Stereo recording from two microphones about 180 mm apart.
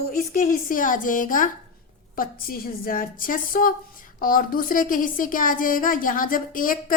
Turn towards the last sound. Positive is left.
turn(degrees=50)  # may be behind; listen again after turning